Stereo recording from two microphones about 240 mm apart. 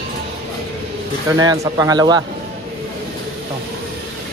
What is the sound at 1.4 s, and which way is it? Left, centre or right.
Speech, centre.